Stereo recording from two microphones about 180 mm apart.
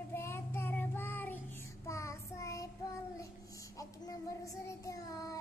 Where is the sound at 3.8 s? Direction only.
20° left (ahead or behind).